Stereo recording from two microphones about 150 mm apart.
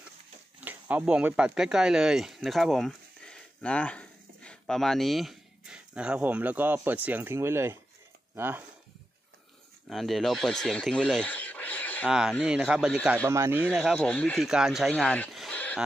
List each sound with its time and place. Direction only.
0.6 s speech: 10° right (ahead or behind)
9.8 s speech: centre (ahead or behind)
12.1 s speech: 5° right (ahead or behind)
13.3 s speech: 20° right (ahead or behind)
13.7 s speech: 5° left (ahead or behind)
14.4 s speech: 5° right (ahead or behind)
15.3 s a sound: 5° left (ahead or behind)